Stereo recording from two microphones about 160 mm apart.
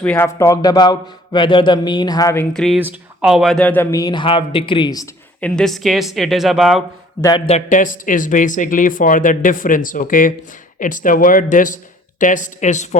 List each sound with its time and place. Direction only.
0.0 s a man's voice: 10° left (ahead or behind)
2.7 s speech: 10° right (ahead or behind); by 4.0 s 10° left (ahead or behind)
4.0 s speech: 30° left (ahead or behind)
5.4 s speech: 5° left (ahead or behind)
7.2 s a man's voice: 25° left (ahead or behind)
7.4 s a woman's voice: 50° left (ahead or behind)